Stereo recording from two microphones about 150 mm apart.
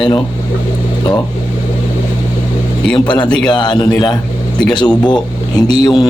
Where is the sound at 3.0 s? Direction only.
30° left (ahead or behind).